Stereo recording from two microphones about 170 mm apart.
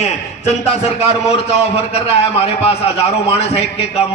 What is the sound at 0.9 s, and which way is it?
A man's voice, 40° left (ahead or behind).